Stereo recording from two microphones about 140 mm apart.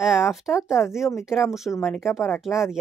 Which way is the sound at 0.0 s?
5° right (ahead or behind).